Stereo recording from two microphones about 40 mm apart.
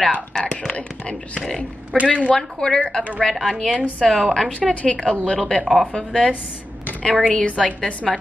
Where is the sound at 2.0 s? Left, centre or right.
Right.